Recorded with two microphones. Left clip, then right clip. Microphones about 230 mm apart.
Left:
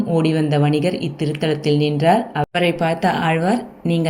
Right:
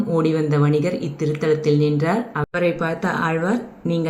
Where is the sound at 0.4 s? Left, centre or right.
Right.